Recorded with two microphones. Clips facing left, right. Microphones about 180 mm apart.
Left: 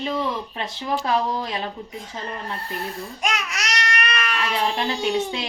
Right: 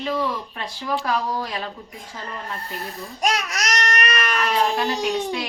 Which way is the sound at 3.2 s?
40° right (ahead or behind).